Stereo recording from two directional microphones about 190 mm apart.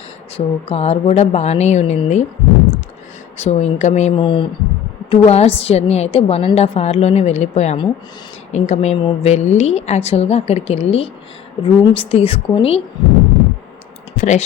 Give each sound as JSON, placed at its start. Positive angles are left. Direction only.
{"t": 0.3, "sound": "a woman's voice", "side_deg": 30}
{"t": 3.3, "sound": "a woman's voice", "side_deg": 35}
{"t": 14.2, "sound": "speech", "side_deg": 40}